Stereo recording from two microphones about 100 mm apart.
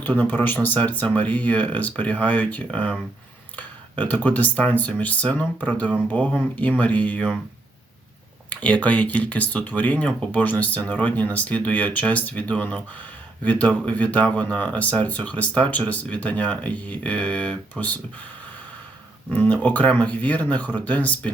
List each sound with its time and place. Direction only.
0.0 s speech: 20° left (ahead or behind)
8.4 s speech: 15° left (ahead or behind)
19.3 s speech: 15° left (ahead or behind)